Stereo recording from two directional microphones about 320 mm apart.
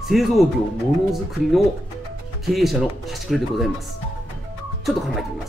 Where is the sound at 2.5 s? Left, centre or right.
Centre.